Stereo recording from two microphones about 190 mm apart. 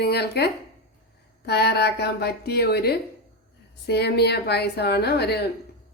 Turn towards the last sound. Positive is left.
turn(degrees=60)  # may be behind; listen again after turning